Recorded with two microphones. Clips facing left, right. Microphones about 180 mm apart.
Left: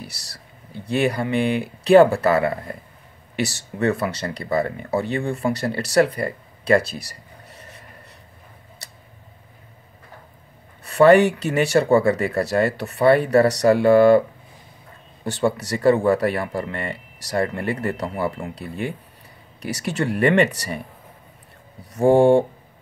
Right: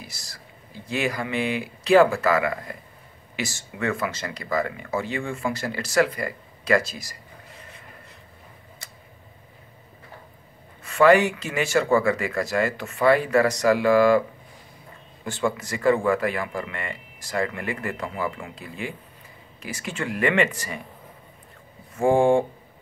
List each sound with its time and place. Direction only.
0.9 s speech: 35° left (ahead or behind)
6.8 s speech: 65° left (ahead or behind)
10.8 s speech: 35° left (ahead or behind)
15.2 s speech: 35° left (ahead or behind)
19.7 s speech: 40° left (ahead or behind)